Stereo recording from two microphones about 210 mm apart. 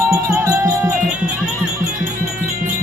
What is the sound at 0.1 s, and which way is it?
Music, 15° right (ahead or behind).